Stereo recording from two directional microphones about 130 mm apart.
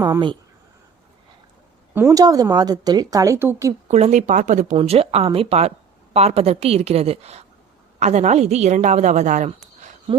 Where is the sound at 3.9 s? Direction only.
60° right (ahead or behind).